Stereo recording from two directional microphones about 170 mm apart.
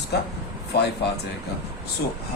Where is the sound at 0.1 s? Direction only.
75° left (ahead or behind).